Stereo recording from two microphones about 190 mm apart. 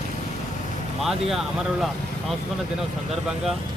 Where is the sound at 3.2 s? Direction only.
Centre (ahead or behind).